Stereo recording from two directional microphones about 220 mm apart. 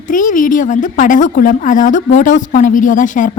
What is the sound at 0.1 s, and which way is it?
A woman's voice, 35° left (ahead or behind).